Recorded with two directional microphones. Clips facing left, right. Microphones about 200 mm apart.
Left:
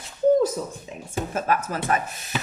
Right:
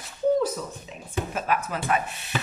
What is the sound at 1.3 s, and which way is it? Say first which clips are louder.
A woman's voice: left 4 dB; 45° left (ahead or behind).